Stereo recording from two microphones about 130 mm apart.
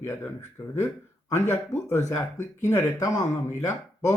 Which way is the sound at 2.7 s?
30° left (ahead or behind).